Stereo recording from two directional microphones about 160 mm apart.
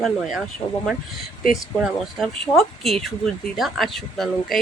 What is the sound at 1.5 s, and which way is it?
Speech, centre (ahead or behind).